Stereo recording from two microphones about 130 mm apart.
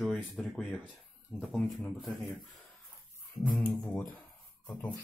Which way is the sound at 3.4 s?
10° left (ahead or behind).